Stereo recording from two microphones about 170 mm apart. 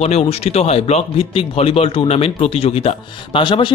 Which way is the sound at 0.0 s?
40° left (ahead or behind).